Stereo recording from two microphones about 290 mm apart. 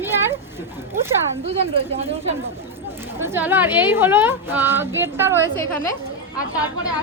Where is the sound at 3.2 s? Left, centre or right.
Centre.